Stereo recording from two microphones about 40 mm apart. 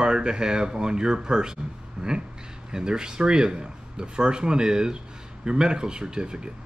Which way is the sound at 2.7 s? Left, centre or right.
Centre.